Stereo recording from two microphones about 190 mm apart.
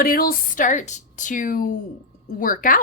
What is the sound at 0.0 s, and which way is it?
A woman's voice, 50° left (ahead or behind).